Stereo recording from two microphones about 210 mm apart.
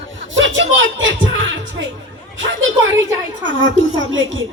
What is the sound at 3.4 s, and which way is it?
A woman's voice, 65° right (ahead or behind).